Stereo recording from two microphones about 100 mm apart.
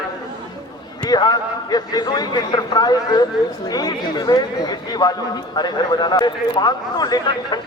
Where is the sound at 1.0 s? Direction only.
40° left (ahead or behind).